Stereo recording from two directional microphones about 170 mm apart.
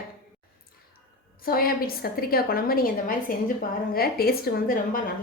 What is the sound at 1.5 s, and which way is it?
A woman's voice, 60° left (ahead or behind).